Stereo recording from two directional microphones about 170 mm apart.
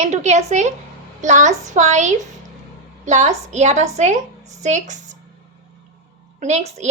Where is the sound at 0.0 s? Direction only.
45° right (ahead or behind).